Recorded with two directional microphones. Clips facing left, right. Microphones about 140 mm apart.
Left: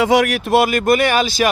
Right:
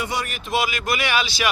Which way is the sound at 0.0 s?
90° left.